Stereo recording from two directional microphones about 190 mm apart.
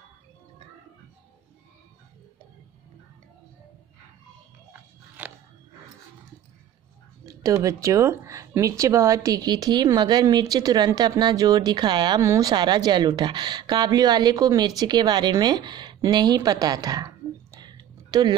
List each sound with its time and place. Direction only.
5.2 s biting: 5° right (ahead or behind)
7.2 s speech: 15° right (ahead or behind)
17.6 s a sound: 20° right (ahead or behind)